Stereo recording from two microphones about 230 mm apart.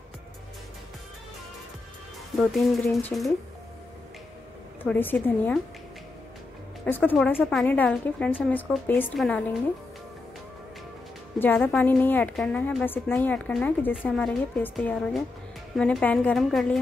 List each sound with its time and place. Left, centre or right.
2.3 s a woman's voice: centre
4.8 s a woman's voice: centre
7.1 s a woman's voice: centre
11.3 s a woman's voice: centre